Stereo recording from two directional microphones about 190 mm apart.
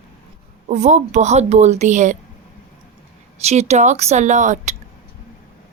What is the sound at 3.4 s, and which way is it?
A woman's voice, 35° right (ahead or behind).